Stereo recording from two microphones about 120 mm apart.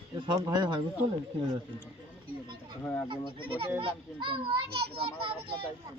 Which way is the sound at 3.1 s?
50° right (ahead or behind).